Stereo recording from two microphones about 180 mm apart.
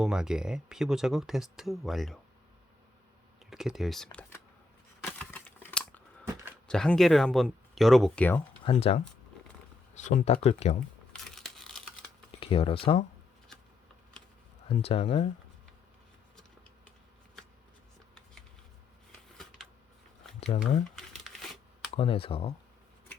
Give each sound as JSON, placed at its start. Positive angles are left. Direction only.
{"t": 0.0, "sound": "speech", "side_deg": -5}
{"t": 3.5, "sound": "speech", "side_deg": 0}
{"t": 5.0, "sound": "crumpling", "side_deg": 5}
{"t": 6.7, "sound": "speech", "side_deg": 5}
{"t": 8.6, "sound": "speech", "side_deg": 35}
{"t": 11.1, "sound": "tearing", "side_deg": 0}
{"t": 12.4, "sound": "speech", "side_deg": 30}
{"t": 14.7, "sound": "speech", "side_deg": 35}
{"t": 20.9, "sound": "crumpling", "side_deg": 0}
{"t": 21.9, "sound": "speech", "side_deg": 30}